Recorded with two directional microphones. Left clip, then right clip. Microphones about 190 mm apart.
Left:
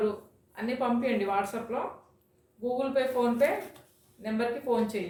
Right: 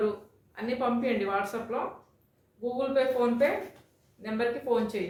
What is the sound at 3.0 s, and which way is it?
Speech, 20° right (ahead or behind).